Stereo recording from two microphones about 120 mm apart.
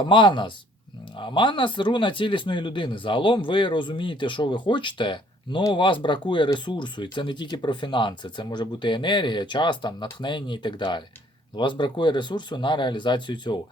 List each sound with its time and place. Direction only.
0.0 s speech: 40° left (ahead or behind)